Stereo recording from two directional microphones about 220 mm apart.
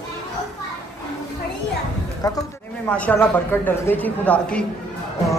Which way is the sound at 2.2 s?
15° left (ahead or behind).